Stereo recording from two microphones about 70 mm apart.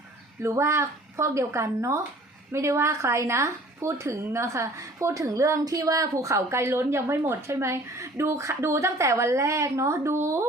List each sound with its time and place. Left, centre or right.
0.4 s speech: right